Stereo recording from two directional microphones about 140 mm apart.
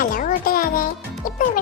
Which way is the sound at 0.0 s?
70° left (ahead or behind).